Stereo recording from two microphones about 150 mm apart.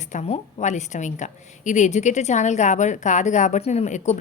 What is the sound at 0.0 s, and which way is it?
A woman's voice, 50° left (ahead or behind).